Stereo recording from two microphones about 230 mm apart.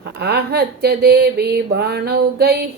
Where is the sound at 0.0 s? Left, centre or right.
Right.